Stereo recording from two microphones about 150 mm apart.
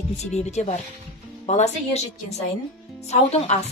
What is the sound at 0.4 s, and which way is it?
Speech, 50° left (ahead or behind).